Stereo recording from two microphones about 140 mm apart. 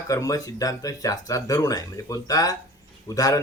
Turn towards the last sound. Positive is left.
turn(degrees=25)  # may be behind; listen again after turning